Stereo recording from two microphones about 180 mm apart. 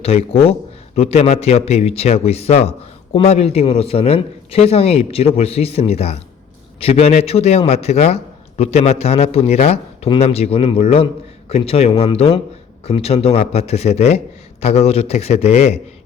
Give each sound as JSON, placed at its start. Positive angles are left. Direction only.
{"t": 0.0, "sound": "a man's voice", "side_deg": 35}